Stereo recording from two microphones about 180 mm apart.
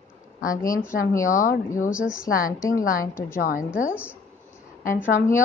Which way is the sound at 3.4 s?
60° left (ahead or behind).